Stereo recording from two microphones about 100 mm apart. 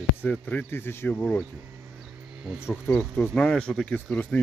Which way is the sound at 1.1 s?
10° left (ahead or behind).